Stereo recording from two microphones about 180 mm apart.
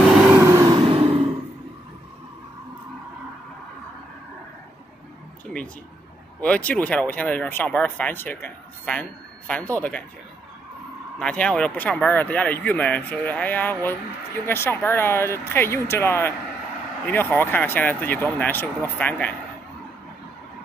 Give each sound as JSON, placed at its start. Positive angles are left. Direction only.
{"t": 0.1, "sound": "vehicle", "side_deg": -5}
{"t": 0.4, "sound": "a sound", "side_deg": -20}
{"t": 6.4, "sound": "speech", "side_deg": 5}
{"t": 11.1, "sound": "speech", "side_deg": 5}